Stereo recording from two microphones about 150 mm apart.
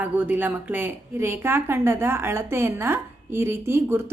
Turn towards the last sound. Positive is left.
turn(degrees=-15)  # may be behind; listen again after turning